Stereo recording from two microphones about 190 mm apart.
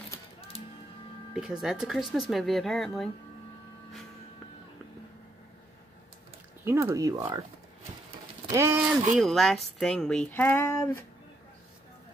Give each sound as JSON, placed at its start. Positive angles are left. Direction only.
{"t": 1.3, "sound": "speech", "side_deg": -5}
{"t": 6.6, "sound": "speech", "side_deg": -15}
{"t": 8.5, "sound": "speech", "side_deg": -15}
{"t": 9.1, "sound": "speech", "side_deg": 0}